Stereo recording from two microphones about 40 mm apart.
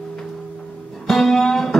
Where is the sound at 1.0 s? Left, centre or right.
Centre.